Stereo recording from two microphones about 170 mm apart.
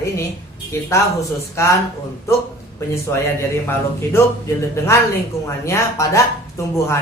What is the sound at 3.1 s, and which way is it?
A man's voice, 15° left (ahead or behind).